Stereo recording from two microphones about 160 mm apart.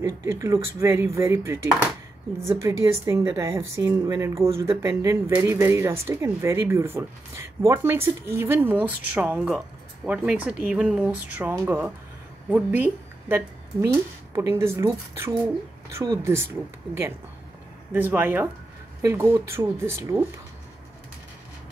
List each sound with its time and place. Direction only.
0.2 s a woman's voice: 20° right (ahead or behind)
2.6 s a woman's voice: 20° right (ahead or behind)
17.9 s a woman's voice: 10° right (ahead or behind)